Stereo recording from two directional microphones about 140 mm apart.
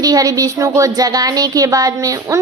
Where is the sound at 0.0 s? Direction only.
25° right (ahead or behind).